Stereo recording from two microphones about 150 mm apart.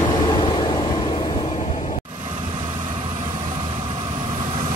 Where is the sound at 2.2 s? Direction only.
35° right (ahead or behind).